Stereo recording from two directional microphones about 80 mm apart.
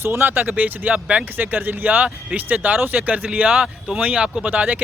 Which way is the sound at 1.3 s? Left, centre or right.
Right.